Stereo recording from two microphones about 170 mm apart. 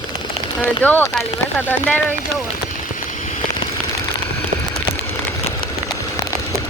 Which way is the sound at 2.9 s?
50° left (ahead or behind).